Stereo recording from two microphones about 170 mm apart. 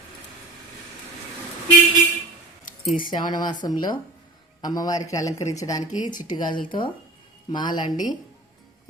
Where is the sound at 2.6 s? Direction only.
50° left (ahead or behind).